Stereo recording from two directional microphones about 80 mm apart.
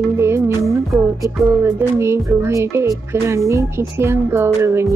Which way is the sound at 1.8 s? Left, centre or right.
Right.